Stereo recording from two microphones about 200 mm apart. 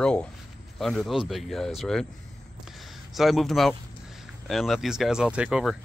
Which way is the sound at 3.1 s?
Centre (ahead or behind).